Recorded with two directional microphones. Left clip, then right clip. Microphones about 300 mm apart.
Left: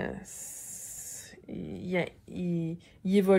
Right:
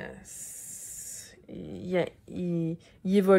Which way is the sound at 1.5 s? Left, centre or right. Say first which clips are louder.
Right 2 dB; centre.